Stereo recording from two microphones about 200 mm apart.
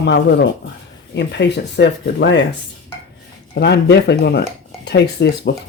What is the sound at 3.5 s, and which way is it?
Speech, 60° left (ahead or behind).